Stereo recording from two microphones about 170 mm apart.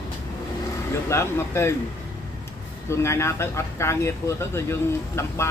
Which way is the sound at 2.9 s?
15° left (ahead or behind).